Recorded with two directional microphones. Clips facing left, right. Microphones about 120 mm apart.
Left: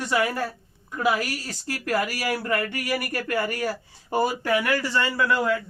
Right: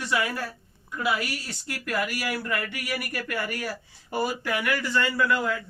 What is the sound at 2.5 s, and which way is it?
Speech, 40° left (ahead or behind).